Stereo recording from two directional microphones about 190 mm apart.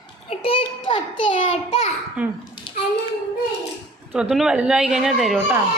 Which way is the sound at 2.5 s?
25° left (ahead or behind).